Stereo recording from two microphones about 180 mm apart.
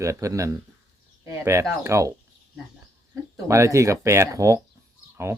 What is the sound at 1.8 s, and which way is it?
Speech, 15° right (ahead or behind).